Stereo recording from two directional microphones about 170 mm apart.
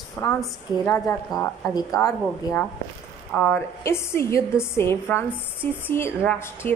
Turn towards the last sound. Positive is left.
turn(degrees=10)  # may be behind; listen again after turning